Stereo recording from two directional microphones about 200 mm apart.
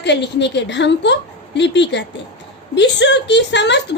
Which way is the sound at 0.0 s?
60° left (ahead or behind).